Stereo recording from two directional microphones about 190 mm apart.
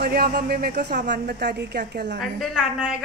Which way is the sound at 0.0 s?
55° right (ahead or behind).